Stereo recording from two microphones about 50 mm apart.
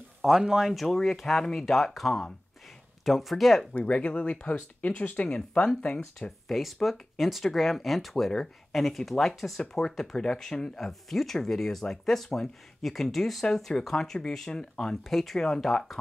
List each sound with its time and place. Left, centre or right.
0.2 s speech: centre
0.7 s speech: centre
3.7 s speech: left
4.8 s speech: left
6.4 s speech: centre
9.6 s speech: centre
15.0 s speech: centre